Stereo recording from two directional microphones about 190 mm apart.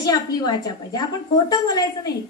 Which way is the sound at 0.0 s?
20° left (ahead or behind).